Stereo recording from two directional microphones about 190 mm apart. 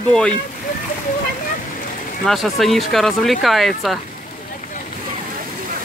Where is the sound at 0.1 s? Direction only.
5° left (ahead or behind).